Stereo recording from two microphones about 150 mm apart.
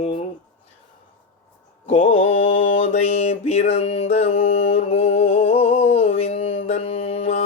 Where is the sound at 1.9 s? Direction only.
45° left (ahead or behind).